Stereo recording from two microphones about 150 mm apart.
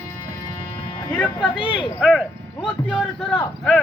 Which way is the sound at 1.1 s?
5° left (ahead or behind).